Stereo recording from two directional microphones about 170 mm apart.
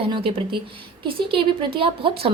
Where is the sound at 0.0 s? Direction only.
30° right (ahead or behind).